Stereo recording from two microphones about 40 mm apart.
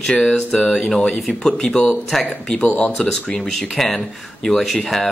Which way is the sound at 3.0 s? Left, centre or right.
Centre.